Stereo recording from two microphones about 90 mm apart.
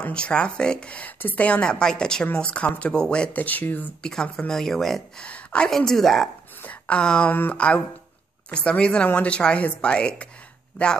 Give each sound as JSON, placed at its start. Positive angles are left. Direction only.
{"t": 0.0, "sound": "a woman's voice", "side_deg": 10}
{"t": 4.0, "sound": "a woman's voice", "side_deg": 5}
{"t": 6.6, "sound": "a woman's voice", "side_deg": 15}